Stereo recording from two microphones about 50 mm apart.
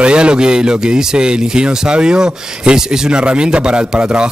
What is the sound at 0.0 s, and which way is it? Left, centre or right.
Speech, right.